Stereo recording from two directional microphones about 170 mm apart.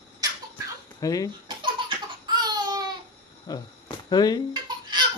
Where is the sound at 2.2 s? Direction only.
25° right (ahead or behind).